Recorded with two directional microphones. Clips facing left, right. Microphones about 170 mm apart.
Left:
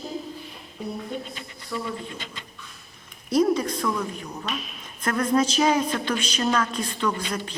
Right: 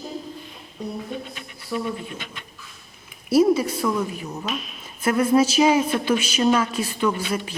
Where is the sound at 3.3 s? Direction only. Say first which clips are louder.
Right 4 dB; 5° right (ahead or behind).